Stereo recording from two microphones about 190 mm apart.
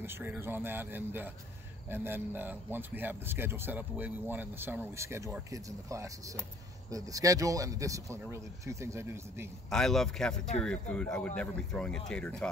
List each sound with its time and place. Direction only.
0.0 s speech: 10° right (ahead or behind)
9.7 s speech: centre (ahead or behind)